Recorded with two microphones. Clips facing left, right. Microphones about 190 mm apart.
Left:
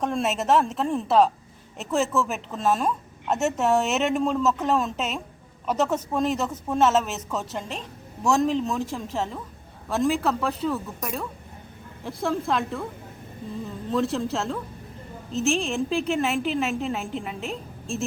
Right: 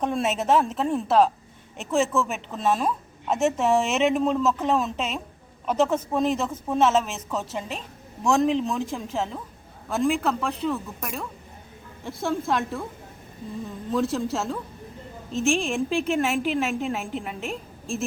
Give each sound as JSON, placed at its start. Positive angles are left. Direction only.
{"t": 0.0, "sound": "speech", "side_deg": 0}
{"t": 13.9, "sound": "speech", "side_deg": 0}
{"t": 15.7, "sound": "speech", "side_deg": 0}